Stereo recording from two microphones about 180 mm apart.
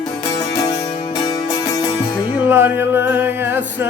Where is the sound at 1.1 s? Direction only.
20° left (ahead or behind).